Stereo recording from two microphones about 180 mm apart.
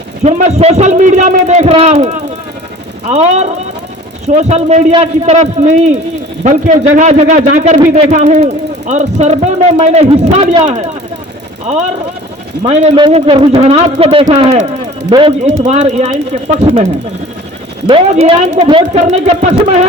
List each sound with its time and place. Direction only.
0.3 s speech: 40° right (ahead or behind)
15.6 s speech: 40° right (ahead or behind)
18.1 s speech: 40° right (ahead or behind)